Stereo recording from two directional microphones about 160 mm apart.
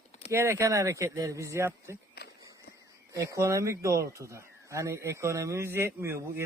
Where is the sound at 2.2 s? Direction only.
80° left.